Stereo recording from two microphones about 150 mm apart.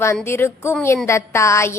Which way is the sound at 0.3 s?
15° left (ahead or behind).